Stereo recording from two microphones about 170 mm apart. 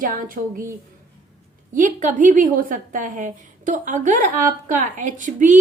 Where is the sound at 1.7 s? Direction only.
45° right (ahead or behind).